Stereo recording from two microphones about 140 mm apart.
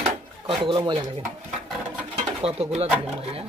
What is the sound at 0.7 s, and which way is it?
Speech, 35° right (ahead or behind).